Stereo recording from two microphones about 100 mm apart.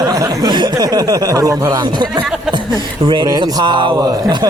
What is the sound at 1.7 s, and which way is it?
Speech, 50° right (ahead or behind).